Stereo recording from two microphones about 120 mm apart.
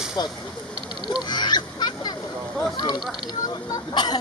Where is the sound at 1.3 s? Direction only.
35° left (ahead or behind).